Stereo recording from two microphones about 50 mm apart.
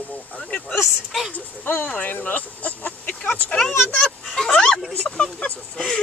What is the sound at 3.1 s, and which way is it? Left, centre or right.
Speech, centre.